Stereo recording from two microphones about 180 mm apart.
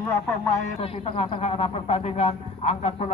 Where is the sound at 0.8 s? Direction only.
30° left (ahead or behind).